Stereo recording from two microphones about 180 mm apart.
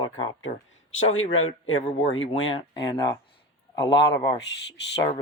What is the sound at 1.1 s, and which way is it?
Speech, 90° left.